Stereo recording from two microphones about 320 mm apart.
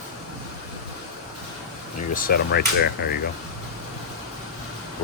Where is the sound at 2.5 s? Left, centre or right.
Left.